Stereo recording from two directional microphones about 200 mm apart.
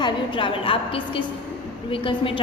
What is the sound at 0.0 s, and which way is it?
A woman's voice, 25° left (ahead or behind).